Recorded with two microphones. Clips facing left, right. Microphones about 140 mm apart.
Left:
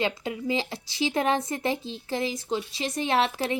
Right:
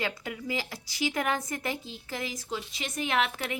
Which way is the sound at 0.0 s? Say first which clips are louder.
Left 6 dB; 25° left (ahead or behind).